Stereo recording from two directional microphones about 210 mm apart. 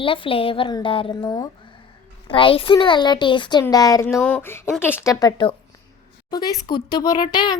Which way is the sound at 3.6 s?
15° left (ahead or behind).